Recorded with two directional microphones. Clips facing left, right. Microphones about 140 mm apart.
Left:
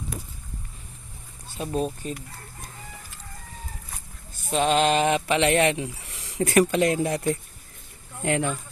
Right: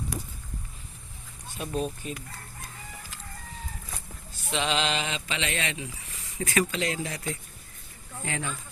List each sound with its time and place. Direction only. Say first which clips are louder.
1.5 s speech: left 4 dB; 35° left (ahead or behind)
4.5 s speech: left 7 dB; 50° left (ahead or behind)
8.2 s speech: left 9 dB; 65° left (ahead or behind)